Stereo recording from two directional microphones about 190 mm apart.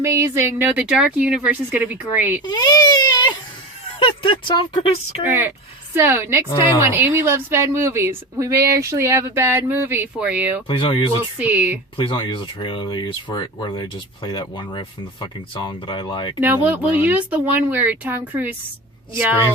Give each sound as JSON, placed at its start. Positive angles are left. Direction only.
{"t": 0.0, "sound": "a woman's voice", "side_deg": -15}
{"t": 2.4, "sound": "baby cry", "side_deg": 20}
{"t": 4.0, "sound": "speech", "side_deg": 25}
{"t": 5.2, "sound": "a woman's voice", "side_deg": -10}
{"t": 10.7, "sound": "speech", "side_deg": 25}
{"t": 11.3, "sound": "a woman's voice", "side_deg": -10}
{"t": 11.9, "sound": "speech", "side_deg": 25}
{"t": 16.4, "sound": "a woman's voice", "side_deg": -10}